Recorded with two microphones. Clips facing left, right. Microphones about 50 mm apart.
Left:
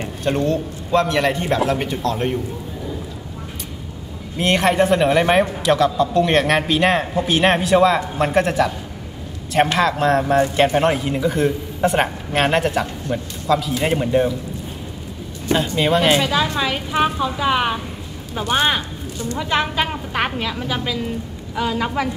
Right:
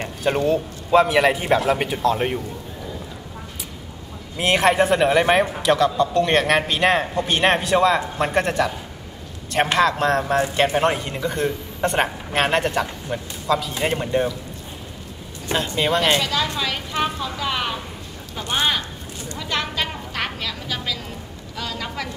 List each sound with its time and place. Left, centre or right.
0.2 s a man's voice: centre
4.4 s a man's voice: centre
9.8 s a man's voice: centre
15.4 s a man's voice: centre
16.2 s a woman's voice: centre